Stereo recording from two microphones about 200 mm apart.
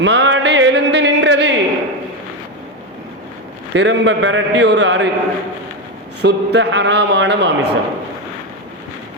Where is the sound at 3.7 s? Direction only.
65° right (ahead or behind).